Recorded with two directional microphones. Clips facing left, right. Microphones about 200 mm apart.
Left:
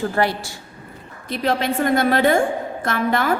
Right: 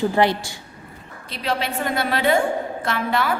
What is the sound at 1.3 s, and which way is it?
A woman's voice, 45° left (ahead or behind).